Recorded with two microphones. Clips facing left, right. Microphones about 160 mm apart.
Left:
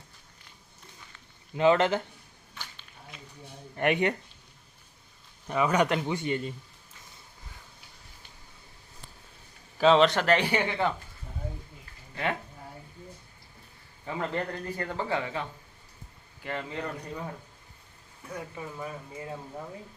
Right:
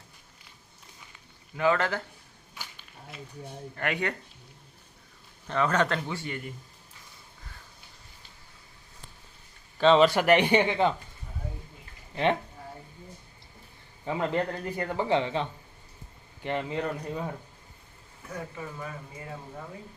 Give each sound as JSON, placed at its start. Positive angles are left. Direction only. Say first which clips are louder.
{"t": 1.5, "sound": "speech", "louder": "left 3 dB", "side_deg": 20}
{"t": 2.6, "sound": "a sound", "louder": "right 1 dB", "side_deg": -10}
{"t": 3.8, "sound": "speech", "louder": "left 5 dB", "side_deg": 20}
{"t": 5.5, "sound": "a man's voice", "louder": "left 1 dB", "side_deg": 10}
{"t": 9.7, "sound": "a man's voice", "louder": "right 1 dB", "side_deg": 5}
{"t": 12.1, "sound": "speech", "louder": "right 6 dB", "side_deg": -25}
{"t": 14.0, "sound": "speech", "louder": "right 4 dB", "side_deg": -20}
{"t": 18.5, "sound": "speech", "louder": "left 1 dB", "side_deg": 20}